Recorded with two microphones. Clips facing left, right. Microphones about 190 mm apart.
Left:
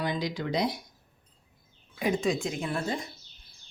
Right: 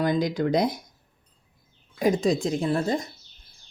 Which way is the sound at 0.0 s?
45° right (ahead or behind).